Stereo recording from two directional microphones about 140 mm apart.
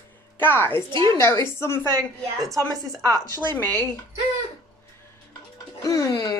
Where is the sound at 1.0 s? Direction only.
20° left (ahead or behind).